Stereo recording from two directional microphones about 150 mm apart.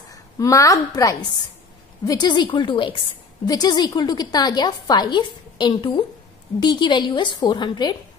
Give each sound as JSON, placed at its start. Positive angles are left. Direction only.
{"t": 0.1, "sound": "a woman's voice", "side_deg": 20}